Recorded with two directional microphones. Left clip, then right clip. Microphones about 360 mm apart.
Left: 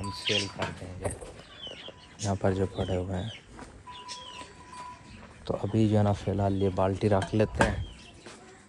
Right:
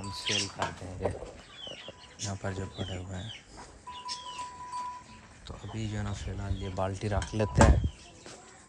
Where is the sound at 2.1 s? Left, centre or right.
Centre.